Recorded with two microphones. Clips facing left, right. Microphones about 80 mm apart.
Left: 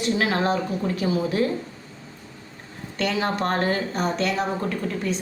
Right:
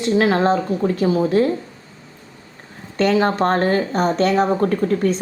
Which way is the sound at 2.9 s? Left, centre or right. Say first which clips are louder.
Right 8 dB; right.